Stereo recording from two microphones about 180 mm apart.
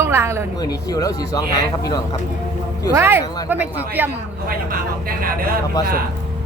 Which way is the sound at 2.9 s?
15° right (ahead or behind).